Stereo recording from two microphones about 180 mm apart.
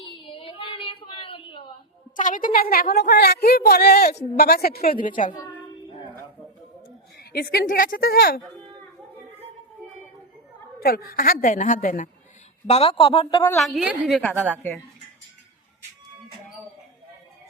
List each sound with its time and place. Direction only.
0.0 s a sound: 30° left (ahead or behind)
2.1 s a woman's voice: 45° left (ahead or behind)
5.0 s a woman's voice: 45° left (ahead or behind)
7.2 s a woman's voice: 60° left (ahead or behind)
10.8 s a woman's voice: 55° left (ahead or behind)
12.6 s a man's voice: 35° left (ahead or behind)
13.6 s a woman's voice: centre (ahead or behind)